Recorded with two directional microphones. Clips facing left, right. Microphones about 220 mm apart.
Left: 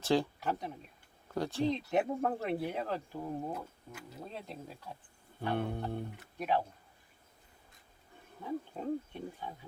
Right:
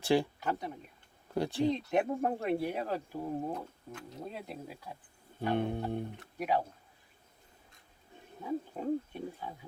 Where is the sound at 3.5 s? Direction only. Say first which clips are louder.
Right 2 dB; 5° left (ahead or behind).